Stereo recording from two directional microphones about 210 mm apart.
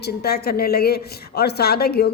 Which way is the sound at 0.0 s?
50° left (ahead or behind).